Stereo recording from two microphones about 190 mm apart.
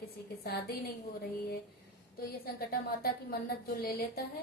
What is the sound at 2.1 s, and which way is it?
A woman's voice, 50° left (ahead or behind).